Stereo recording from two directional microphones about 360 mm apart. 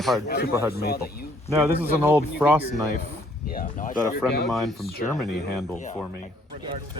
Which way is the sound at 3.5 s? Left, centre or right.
Left.